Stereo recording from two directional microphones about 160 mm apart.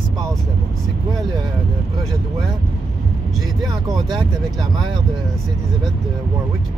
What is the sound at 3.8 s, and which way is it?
Speech, 30° right (ahead or behind).